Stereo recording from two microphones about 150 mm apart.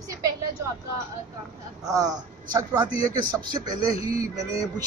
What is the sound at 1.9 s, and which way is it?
Speech, 25° right (ahead or behind).